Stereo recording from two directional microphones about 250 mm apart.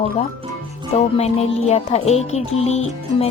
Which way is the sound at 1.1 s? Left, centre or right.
Left.